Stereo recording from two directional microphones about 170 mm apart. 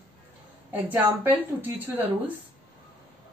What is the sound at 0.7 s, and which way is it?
Speech, 10° right (ahead or behind).